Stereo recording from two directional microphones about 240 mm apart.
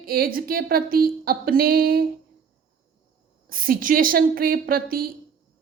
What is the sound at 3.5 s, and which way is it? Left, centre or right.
Speech, right.